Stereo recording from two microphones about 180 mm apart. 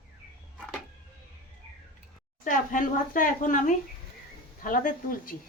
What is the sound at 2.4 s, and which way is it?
A woman's voice, 50° left (ahead or behind).